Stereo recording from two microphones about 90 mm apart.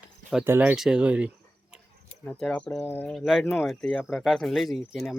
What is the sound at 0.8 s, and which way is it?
Speech, 10° right (ahead or behind).